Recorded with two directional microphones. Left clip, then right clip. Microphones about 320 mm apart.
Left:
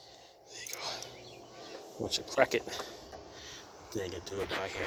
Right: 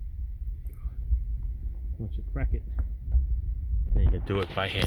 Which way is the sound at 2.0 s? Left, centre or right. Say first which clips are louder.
Left 14 dB; centre.